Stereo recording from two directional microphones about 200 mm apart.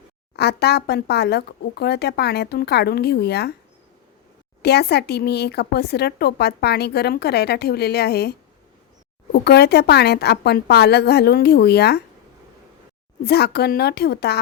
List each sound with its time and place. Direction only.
0.3 s speech: 55° left (ahead or behind)
4.6 s speech: 55° left (ahead or behind)
13.2 s speech: 55° left (ahead or behind)